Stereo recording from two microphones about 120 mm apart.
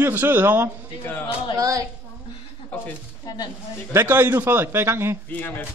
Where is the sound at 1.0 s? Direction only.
15° left (ahead or behind).